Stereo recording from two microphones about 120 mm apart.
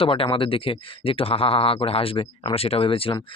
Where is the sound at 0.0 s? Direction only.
50° left (ahead or behind).